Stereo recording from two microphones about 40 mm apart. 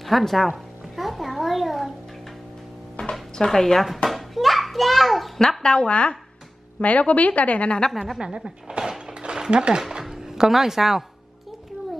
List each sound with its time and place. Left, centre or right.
0.0 s speech: centre
0.5 s babbling: centre
3.0 s music: centre
4.1 s children playing: centre
5.6 s a woman's voice: left
8.2 s a sound: centre
9.2 s music: right
10.0 s speech: centre